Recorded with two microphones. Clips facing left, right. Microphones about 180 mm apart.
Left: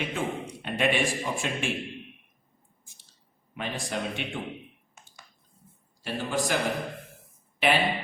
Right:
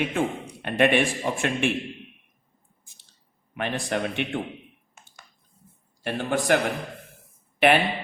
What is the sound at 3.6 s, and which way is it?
Speech, 60° right (ahead or behind).